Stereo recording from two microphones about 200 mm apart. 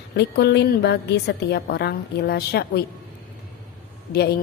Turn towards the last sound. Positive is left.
turn(degrees=55)  # may be behind; listen again after turning